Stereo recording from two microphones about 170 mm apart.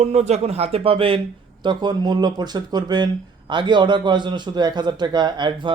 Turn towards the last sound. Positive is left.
turn(degrees=-25)  # may be behind; listen again after turning